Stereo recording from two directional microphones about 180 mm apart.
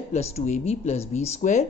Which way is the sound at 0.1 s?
35° left (ahead or behind).